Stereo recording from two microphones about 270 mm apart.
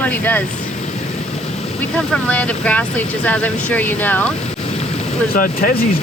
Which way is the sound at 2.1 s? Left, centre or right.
Centre.